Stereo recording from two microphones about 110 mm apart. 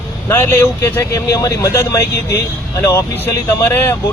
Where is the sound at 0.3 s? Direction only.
20° left (ahead or behind).